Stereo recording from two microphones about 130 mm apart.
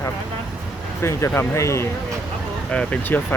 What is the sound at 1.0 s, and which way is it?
Speech, 20° left (ahead or behind).